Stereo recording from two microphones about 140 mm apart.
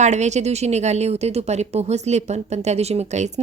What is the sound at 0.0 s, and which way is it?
Speech, 55° right (ahead or behind).